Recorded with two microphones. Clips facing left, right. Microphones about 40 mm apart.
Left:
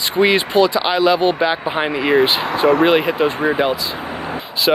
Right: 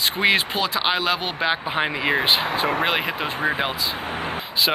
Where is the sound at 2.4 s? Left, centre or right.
Left.